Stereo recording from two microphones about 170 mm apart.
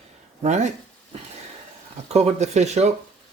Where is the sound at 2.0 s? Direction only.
40° right (ahead or behind).